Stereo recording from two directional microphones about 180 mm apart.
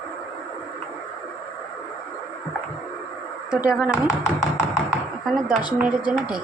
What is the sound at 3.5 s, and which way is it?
Speech, 5° right (ahead or behind).